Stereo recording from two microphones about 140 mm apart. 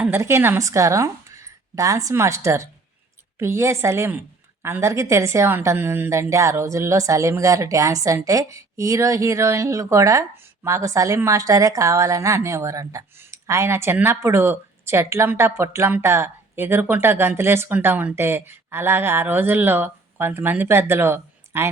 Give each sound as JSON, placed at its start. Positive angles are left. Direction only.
{"t": 0.0, "sound": "a woman's voice", "side_deg": -15}